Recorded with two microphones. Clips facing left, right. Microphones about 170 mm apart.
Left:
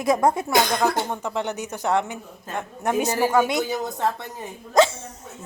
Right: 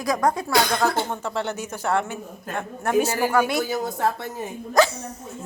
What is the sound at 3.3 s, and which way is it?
Speech, 20° left (ahead or behind).